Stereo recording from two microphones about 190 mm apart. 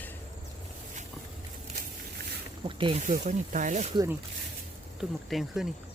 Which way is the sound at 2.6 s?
30° right (ahead or behind).